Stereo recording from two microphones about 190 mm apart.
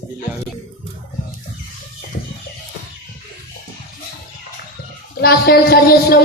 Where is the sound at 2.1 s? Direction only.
55° left (ahead or behind).